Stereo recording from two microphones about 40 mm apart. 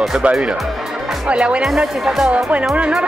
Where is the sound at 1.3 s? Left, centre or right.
Right.